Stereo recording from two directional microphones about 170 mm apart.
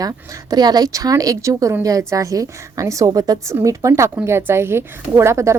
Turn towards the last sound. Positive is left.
turn(degrees=-15)  # may be behind; listen again after turning